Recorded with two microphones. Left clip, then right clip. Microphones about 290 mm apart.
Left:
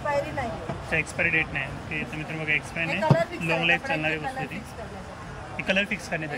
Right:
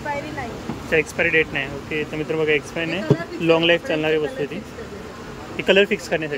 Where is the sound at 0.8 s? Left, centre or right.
Centre.